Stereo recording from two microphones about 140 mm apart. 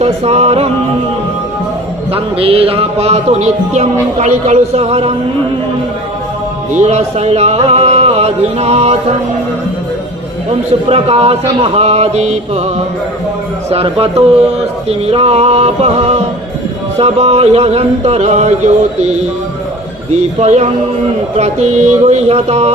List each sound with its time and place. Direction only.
0.0 s speech: 50° right (ahead or behind)
2.1 s speech: 40° right (ahead or behind)
6.7 s speech: 50° right (ahead or behind)
10.8 s speech: 45° right (ahead or behind)
20.4 s speech: 50° right (ahead or behind)